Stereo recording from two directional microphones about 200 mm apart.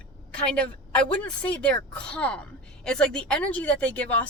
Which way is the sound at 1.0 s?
5° left (ahead or behind).